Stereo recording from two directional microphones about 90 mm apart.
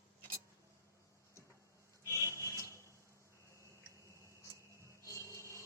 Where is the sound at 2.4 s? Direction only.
35° left (ahead or behind).